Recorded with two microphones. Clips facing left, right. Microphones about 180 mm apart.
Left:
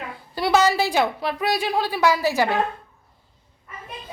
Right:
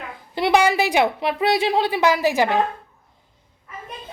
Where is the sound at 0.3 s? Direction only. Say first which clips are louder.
Right 1 dB; 20° right (ahead or behind).